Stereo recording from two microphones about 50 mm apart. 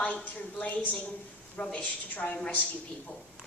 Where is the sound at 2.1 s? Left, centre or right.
Left.